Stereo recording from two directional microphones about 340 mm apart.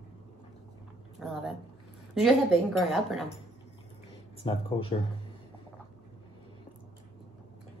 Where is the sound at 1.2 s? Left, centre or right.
Centre.